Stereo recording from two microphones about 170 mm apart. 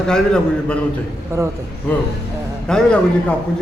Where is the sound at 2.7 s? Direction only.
5° left (ahead or behind).